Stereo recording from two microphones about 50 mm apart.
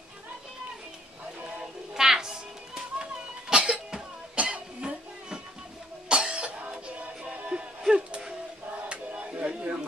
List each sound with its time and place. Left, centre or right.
1.4 s music: centre
6.0 s cough: centre
7.3 s music: centre
8.8 s a sound: right